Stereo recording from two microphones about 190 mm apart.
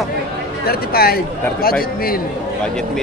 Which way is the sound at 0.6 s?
55° left (ahead or behind).